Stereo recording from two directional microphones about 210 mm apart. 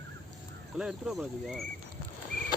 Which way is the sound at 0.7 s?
5° right (ahead or behind).